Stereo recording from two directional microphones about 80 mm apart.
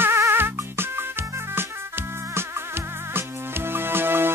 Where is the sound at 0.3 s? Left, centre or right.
Right.